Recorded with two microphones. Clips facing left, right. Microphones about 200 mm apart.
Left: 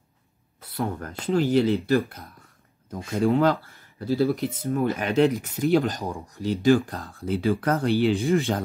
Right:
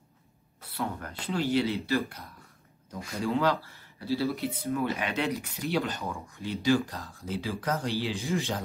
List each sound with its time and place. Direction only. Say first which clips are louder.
0.7 s speech: left 5 dB; 45° left (ahead or behind)
6.6 s speech: left 6 dB; 50° left (ahead or behind)